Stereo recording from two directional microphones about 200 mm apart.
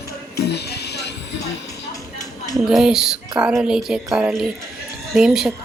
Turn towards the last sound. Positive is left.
turn(degrees=-5)  # may be behind; listen again after turning